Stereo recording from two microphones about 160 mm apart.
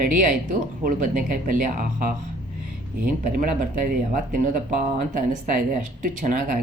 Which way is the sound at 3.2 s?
60° right (ahead or behind).